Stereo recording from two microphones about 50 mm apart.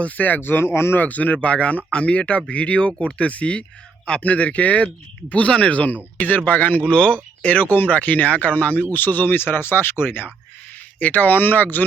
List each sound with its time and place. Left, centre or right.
0.0 s speech: left
0.9 s speech: left
11.0 s speech: left